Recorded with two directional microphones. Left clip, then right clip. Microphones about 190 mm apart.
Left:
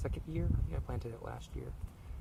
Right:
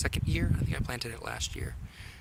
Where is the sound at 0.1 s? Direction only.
15° right (ahead or behind).